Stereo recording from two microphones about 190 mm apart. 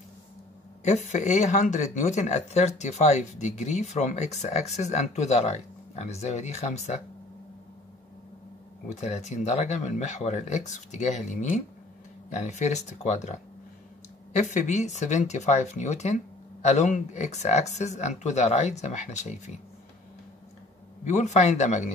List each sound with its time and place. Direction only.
0.8 s speech: 40° left (ahead or behind)
8.8 s speech: 35° left (ahead or behind)
21.0 s speech: 40° left (ahead or behind)